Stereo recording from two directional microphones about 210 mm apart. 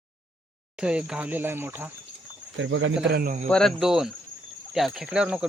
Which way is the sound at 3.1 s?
50° right (ahead or behind).